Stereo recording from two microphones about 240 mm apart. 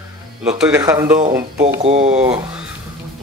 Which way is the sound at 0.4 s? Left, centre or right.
Centre.